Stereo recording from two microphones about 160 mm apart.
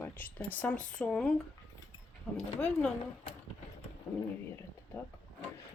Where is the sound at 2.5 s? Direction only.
5° left (ahead or behind).